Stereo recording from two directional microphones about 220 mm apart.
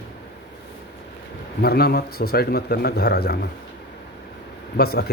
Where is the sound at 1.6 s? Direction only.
45° left (ahead or behind).